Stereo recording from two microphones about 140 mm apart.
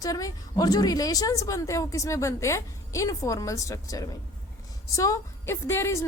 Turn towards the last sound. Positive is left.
turn(degrees=20)  # may be behind; listen again after turning